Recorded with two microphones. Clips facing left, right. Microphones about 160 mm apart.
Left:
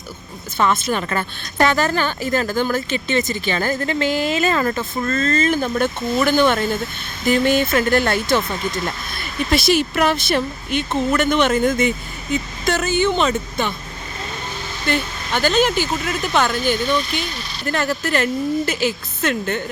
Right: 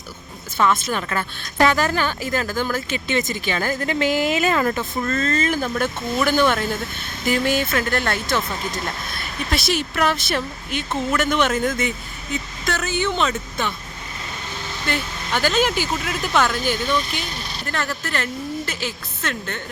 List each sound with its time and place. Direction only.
0.6 s a woman's voice: centre (ahead or behind)
4.7 s speech: centre (ahead or behind)
5.0 s a woman's voice: 10° right (ahead or behind)
14.8 s a woman's voice: 5° right (ahead or behind)